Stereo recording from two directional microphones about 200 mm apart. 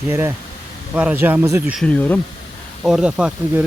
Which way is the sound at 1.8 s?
5° left (ahead or behind).